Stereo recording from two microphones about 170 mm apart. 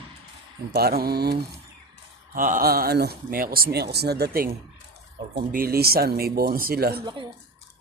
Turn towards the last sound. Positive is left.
turn(degrees=-25)  # may be behind; listen again after turning